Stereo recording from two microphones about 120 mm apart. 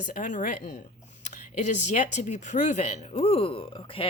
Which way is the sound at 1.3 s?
90° left.